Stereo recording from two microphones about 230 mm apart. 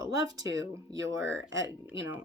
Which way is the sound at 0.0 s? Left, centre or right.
Centre.